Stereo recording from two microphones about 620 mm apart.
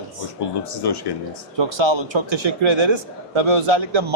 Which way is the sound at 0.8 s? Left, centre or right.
Left.